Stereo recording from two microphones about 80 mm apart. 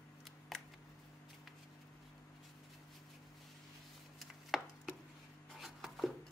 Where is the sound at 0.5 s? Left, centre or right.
Centre.